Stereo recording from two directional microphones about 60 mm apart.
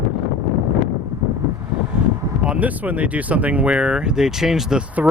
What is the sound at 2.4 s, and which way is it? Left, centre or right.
Speech, right.